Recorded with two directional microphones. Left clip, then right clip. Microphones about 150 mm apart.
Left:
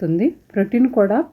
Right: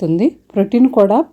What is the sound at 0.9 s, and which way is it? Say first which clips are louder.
Speech: right 5 dB; 25° right (ahead or behind).